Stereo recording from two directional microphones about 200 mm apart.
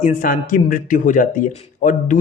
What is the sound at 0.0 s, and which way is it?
Speech, 45° left (ahead or behind).